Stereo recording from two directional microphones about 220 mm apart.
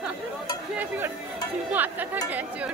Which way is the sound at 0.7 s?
10° right (ahead or behind).